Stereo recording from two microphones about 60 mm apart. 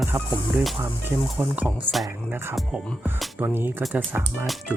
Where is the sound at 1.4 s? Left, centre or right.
Right.